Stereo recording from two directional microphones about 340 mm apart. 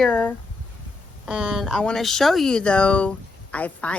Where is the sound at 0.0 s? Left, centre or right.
Centre.